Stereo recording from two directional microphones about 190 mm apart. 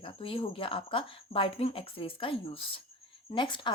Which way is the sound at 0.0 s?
30° left (ahead or behind).